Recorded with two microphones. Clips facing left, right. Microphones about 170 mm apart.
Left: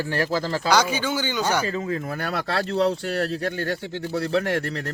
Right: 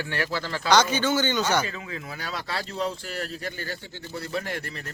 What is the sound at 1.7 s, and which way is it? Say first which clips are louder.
Speech: left 9 dB; 40° left (ahead or behind).